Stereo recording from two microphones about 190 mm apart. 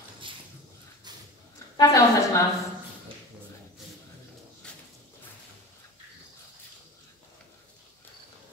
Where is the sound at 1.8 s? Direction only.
15° left (ahead or behind).